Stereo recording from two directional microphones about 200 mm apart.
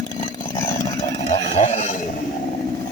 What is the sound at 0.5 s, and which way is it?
Chainsaw, 15° left (ahead or behind).